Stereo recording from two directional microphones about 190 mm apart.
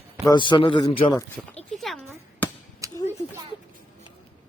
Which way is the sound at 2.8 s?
15° right (ahead or behind).